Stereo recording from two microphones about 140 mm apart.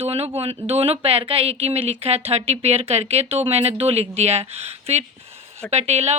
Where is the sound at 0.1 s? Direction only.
45° right (ahead or behind).